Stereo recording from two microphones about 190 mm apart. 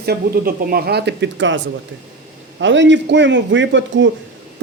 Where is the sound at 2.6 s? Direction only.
70° right (ahead or behind).